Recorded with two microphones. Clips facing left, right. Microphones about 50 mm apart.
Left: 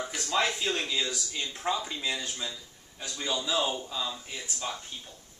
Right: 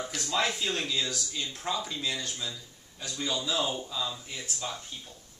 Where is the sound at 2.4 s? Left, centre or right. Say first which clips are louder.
Even; centre.